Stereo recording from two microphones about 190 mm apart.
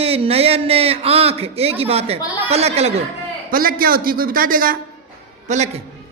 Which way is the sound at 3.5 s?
50° right (ahead or behind).